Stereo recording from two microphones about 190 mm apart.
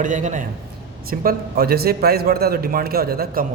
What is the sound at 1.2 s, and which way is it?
A man's voice, 50° right (ahead or behind).